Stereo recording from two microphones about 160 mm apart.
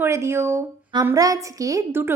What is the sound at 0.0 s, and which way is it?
A woman's voice, 15° right (ahead or behind).